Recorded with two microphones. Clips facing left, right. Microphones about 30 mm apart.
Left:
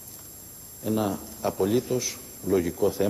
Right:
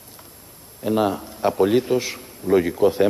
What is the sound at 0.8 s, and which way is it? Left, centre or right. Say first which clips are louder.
A man's voice: right 6 dB; right.